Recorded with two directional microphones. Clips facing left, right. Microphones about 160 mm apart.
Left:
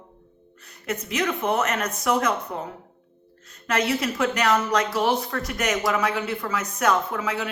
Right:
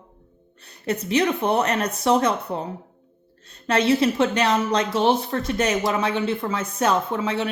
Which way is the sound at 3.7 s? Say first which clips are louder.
Right 5 dB; 30° right (ahead or behind).